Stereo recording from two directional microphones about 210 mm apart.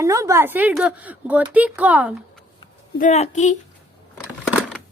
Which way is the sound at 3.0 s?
35° left (ahead or behind).